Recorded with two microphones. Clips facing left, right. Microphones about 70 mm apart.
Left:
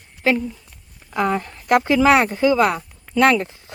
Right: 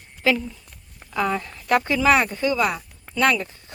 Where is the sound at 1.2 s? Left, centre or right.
Left.